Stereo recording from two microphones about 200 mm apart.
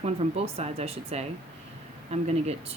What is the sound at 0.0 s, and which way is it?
Speech, 30° right (ahead or behind).